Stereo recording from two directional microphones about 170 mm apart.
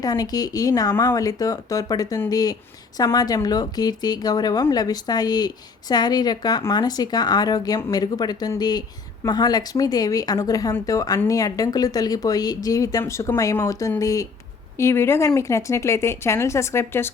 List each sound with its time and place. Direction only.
0.0 s speech: 20° left (ahead or behind)